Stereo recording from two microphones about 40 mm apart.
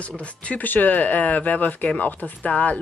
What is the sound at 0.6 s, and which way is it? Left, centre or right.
Speech, left.